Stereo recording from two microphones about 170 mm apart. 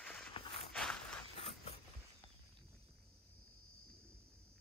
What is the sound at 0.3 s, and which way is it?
Walk, 30° left (ahead or behind).